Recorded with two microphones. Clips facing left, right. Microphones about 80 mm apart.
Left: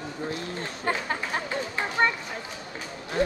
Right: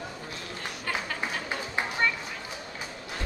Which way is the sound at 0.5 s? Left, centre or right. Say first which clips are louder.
Left 2 dB; left.